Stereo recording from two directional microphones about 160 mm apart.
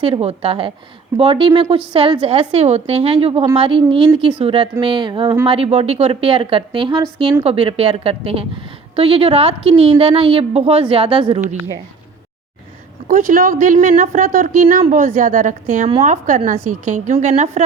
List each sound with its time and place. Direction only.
0.0 s a woman's voice: 40° right (ahead or behind)
13.1 s a woman's voice: 60° right (ahead or behind)